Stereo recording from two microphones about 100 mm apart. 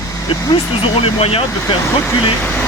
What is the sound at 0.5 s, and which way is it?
Speech, 70° left (ahead or behind).